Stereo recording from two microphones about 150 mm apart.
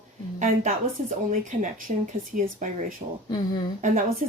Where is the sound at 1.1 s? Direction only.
55° right (ahead or behind).